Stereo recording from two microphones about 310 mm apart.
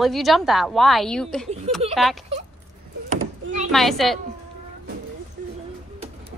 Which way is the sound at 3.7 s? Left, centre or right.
Centre.